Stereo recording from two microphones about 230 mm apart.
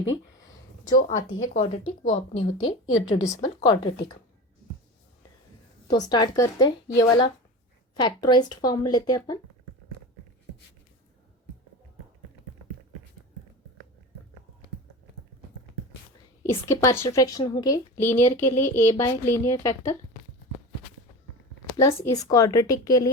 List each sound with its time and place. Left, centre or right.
0.9 s a woman's voice: left
5.9 s a woman's voice: centre
16.4 s a woman's voice: centre
21.8 s a woman's voice: centre